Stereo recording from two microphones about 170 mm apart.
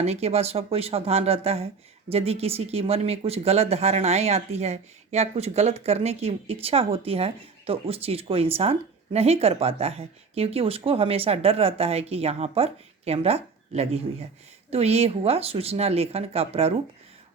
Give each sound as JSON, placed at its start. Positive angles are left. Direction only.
{"t": 0.0, "sound": "speech", "side_deg": -40}